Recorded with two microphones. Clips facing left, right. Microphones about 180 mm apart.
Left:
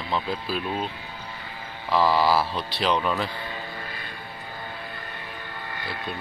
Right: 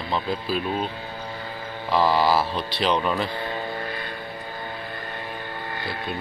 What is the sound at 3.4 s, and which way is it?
Vehicle, 45° right (ahead or behind).